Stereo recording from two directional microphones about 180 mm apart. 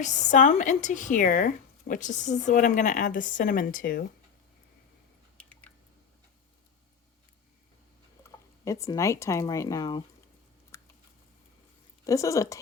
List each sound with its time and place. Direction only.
0.0 s speech: 45° left (ahead or behind)
5.4 s squish: 5° left (ahead or behind)
8.2 s speech: 15° left (ahead or behind)
10.7 s chewing: 15° left (ahead or behind)
12.0 s speech: 15° left (ahead or behind)